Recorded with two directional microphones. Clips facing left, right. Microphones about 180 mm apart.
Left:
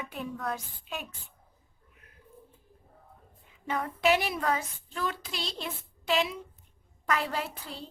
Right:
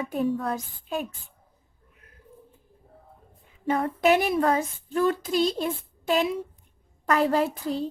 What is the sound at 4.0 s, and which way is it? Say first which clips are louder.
A woman's voice: right 5 dB; 50° right (ahead or behind).